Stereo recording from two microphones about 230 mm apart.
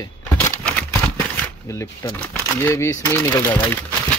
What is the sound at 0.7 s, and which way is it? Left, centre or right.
Speech, centre.